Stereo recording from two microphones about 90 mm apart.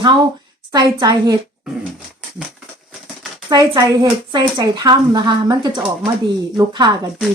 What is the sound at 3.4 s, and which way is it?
A woman's voice, 45° right (ahead or behind).